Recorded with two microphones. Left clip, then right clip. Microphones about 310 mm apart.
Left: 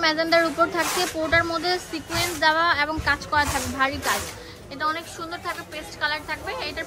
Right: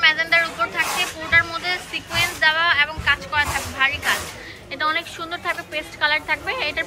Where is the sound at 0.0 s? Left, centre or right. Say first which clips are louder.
Right 3 dB; centre.